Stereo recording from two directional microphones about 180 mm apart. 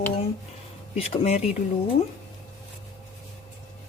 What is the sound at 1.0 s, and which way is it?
Speech, 35° left (ahead or behind).